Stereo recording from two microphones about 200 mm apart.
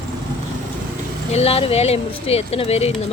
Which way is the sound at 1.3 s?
30° left (ahead or behind).